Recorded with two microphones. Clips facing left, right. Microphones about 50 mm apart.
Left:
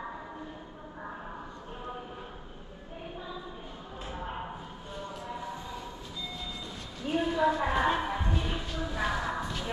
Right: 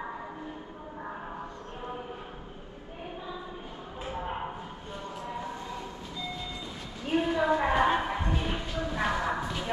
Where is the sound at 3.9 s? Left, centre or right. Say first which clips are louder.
Right 3 dB; centre.